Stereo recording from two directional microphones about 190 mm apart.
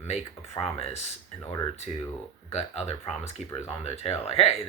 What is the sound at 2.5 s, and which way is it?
Speech, 35° left (ahead or behind).